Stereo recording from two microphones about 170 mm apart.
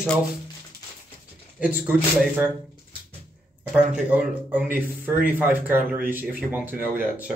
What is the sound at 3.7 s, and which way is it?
Speech, 5° right (ahead or behind).